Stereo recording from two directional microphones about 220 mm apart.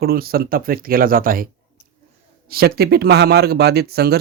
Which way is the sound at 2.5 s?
45° right (ahead or behind).